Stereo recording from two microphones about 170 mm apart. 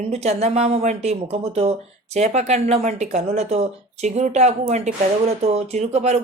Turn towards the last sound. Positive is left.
turn(degrees=-40)  # may be behind; listen again after turning